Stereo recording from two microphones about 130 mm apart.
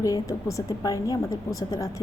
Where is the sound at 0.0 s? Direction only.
25° left (ahead or behind).